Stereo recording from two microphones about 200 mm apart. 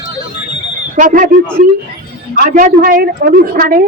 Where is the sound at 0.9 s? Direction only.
40° right (ahead or behind).